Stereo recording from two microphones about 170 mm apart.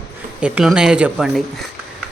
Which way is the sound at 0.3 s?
5° right (ahead or behind).